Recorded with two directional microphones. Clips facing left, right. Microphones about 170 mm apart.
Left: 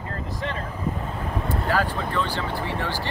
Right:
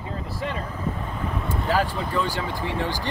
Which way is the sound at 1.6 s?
10° right (ahead or behind).